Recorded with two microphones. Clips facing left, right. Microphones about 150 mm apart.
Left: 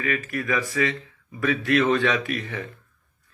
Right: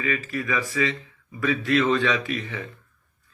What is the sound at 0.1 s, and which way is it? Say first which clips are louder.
A man's voice: left 2 dB; 55° left (ahead or behind).